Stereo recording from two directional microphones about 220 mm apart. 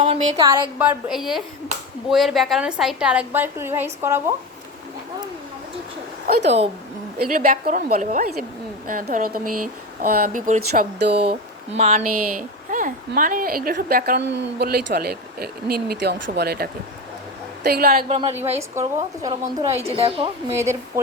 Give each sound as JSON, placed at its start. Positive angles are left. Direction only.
{"t": 0.0, "sound": "a sound", "side_deg": -25}
{"t": 0.5, "sound": "a woman's voice", "side_deg": -5}
{"t": 6.2, "sound": "a woman's voice", "side_deg": -45}
{"t": 11.8, "sound": "a woman's voice", "side_deg": -30}
{"t": 18.1, "sound": "a woman's voice", "side_deg": -30}
{"t": 20.6, "sound": "speech", "side_deg": -15}